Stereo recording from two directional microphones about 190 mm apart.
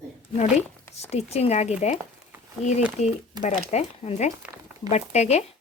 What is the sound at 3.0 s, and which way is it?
Speech, 35° left (ahead or behind).